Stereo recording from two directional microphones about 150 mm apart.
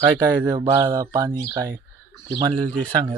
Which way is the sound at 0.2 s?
30° right (ahead or behind).